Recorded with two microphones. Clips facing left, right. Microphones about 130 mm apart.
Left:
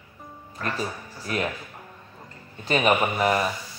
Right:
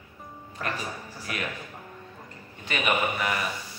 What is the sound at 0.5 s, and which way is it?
Speech, 15° right (ahead or behind).